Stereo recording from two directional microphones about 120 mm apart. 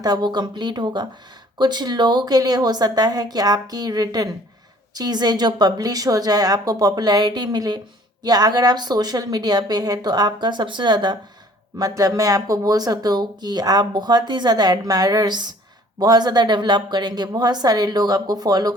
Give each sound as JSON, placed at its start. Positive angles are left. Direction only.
{"t": 0.0, "sound": "speech", "side_deg": -35}